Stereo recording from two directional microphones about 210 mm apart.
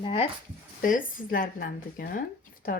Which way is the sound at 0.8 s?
40° left (ahead or behind).